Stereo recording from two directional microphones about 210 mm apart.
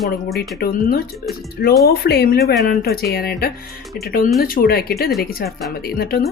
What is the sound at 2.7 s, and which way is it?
Speech, 45° left (ahead or behind).